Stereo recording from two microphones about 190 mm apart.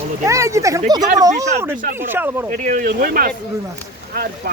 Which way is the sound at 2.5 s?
45° right (ahead or behind).